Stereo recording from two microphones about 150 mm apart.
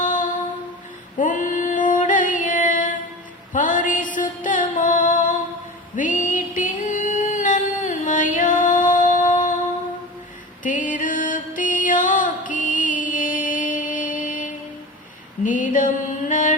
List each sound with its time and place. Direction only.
0.0 s a sound: 60° left (ahead or behind)
1.2 s female singing: 60° left (ahead or behind)
3.5 s music: 60° left (ahead or behind)
10.6 s music: 60° left (ahead or behind)
15.4 s a sound: 60° left (ahead or behind)
16.3 s music: 60° left (ahead or behind)